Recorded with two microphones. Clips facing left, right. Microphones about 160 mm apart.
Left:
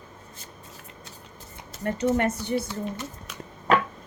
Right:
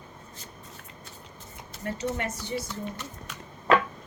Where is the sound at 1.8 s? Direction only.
55° left (ahead or behind).